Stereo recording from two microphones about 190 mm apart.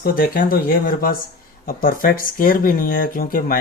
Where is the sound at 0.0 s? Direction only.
50° left (ahead or behind).